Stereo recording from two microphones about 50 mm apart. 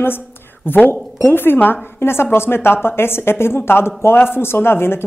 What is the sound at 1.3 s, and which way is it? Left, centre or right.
Speech, left.